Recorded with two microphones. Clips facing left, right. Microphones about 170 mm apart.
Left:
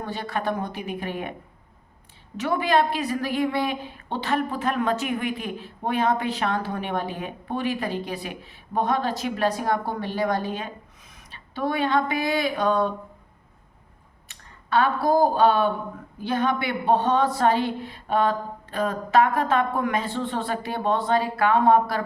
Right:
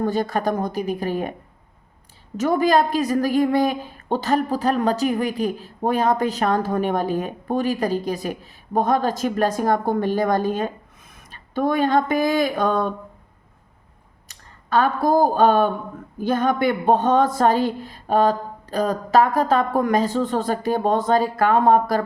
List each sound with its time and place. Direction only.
0.0 s speech: 45° right (ahead or behind)
2.4 s a woman's voice: 40° right (ahead or behind)
14.3 s a woman's voice: 45° right (ahead or behind)